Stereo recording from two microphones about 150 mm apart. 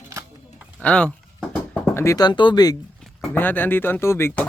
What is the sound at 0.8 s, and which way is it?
Speech, 5° left (ahead or behind).